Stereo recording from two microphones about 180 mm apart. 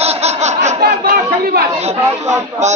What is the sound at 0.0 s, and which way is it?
Laughter, 35° right (ahead or behind).